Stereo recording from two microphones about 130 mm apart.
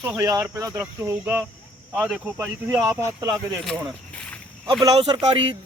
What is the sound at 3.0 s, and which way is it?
Speech, 20° right (ahead or behind).